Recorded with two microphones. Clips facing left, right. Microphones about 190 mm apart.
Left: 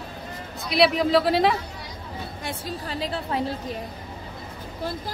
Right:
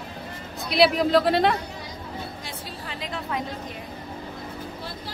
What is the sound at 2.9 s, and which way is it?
Speech, 35° left (ahead or behind).